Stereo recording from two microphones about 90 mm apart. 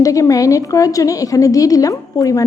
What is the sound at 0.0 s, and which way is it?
A woman's voice, 40° left (ahead or behind).